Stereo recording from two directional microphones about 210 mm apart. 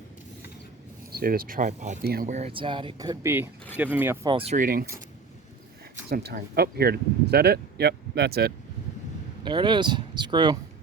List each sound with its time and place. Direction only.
1.1 s speech: 45° right (ahead or behind); by 4.3 s 10° right (ahead or behind)
4.3 s speech: 25° right (ahead or behind)
4.5 s speech: 40° right (ahead or behind)
6.1 s speech: 50° right (ahead or behind)
9.4 s speech: 20° right (ahead or behind)